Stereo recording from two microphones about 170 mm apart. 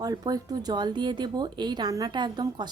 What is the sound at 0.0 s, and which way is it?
A woman's voice, 20° right (ahead or behind).